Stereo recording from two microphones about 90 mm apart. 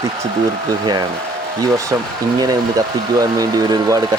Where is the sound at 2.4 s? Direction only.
45° right (ahead or behind).